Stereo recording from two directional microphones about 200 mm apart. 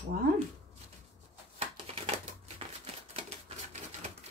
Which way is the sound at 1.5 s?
30° right (ahead or behind).